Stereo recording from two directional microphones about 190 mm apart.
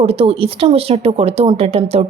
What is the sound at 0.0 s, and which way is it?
Speech, 30° right (ahead or behind).